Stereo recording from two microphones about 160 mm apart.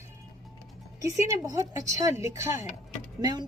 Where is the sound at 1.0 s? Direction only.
20° right (ahead or behind).